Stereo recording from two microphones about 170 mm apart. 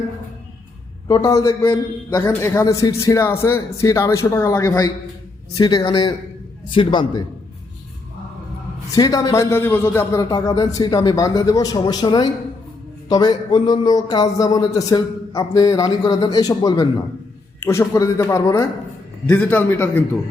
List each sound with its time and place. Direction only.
1.0 s a man's voice: 20° left (ahead or behind)
8.9 s a man's voice: 20° left (ahead or behind)